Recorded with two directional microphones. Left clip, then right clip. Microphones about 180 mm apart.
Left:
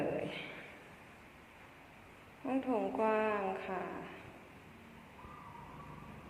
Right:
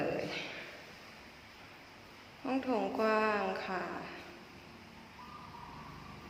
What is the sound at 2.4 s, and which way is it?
A woman's voice, 15° right (ahead or behind).